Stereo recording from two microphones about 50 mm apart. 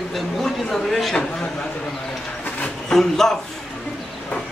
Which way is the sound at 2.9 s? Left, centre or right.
Centre.